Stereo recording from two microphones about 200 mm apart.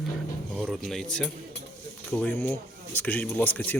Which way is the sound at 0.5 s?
Centre (ahead or behind).